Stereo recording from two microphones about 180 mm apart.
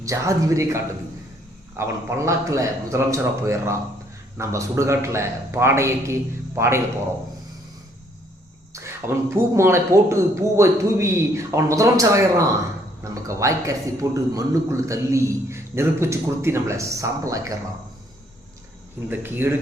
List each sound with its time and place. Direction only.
0.0 s a man's voice: 20° right (ahead or behind)
8.7 s a man's voice: 15° right (ahead or behind)
19.0 s a man's voice: 10° right (ahead or behind)